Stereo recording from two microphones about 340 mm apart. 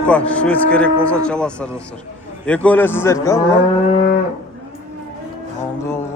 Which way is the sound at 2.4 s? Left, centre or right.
Centre.